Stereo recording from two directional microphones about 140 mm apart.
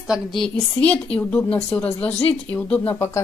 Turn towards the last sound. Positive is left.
turn(degrees=15)  # may be behind; listen again after turning